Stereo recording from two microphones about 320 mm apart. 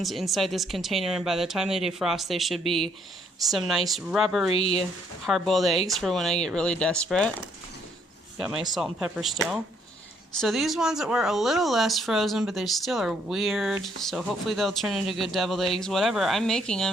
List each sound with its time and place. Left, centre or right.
0.0 s speech: centre
4.5 s speech: centre
5.2 s speech: centre
8.4 s speech: centre